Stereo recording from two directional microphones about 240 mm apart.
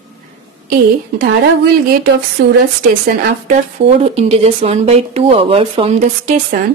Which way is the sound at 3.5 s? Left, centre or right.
Right.